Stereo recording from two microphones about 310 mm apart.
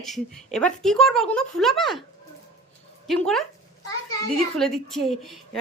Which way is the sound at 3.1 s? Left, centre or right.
Centre.